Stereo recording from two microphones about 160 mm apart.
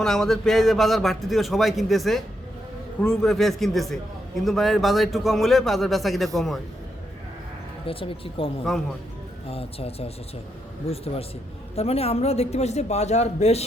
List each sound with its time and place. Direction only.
0.0 s a man's voice: centre (ahead or behind)
7.9 s a man's voice: 35° left (ahead or behind)
8.7 s a man's voice: centre (ahead or behind)
9.5 s a man's voice: 40° left (ahead or behind)